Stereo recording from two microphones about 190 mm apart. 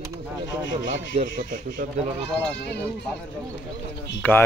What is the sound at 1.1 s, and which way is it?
Speech, 30° right (ahead or behind).